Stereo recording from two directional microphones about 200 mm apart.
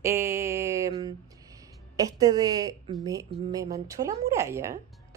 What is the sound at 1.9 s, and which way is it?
A woman's voice, 15° right (ahead or behind).